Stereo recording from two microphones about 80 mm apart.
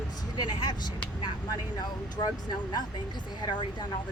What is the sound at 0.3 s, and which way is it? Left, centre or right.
Speech, left.